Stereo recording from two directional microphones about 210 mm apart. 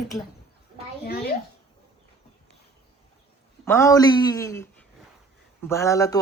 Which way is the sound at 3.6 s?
10° left (ahead or behind).